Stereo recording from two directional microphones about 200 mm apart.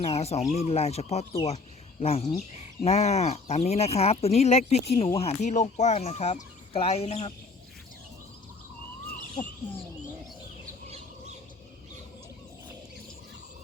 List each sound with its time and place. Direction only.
0.0 s speech: 30° left (ahead or behind)